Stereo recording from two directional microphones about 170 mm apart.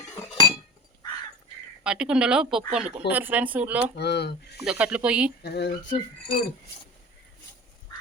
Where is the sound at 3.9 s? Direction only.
80° left.